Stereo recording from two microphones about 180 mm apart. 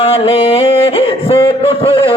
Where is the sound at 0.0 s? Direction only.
30° left (ahead or behind).